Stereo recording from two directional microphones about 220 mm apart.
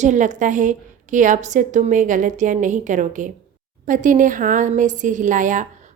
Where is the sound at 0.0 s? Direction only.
35° right (ahead or behind).